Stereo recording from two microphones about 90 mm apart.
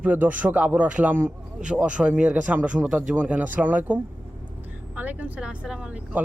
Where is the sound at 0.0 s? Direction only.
20° right (ahead or behind).